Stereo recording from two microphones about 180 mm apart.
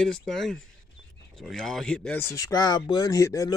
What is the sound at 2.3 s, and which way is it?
Speech, 20° left (ahead or behind).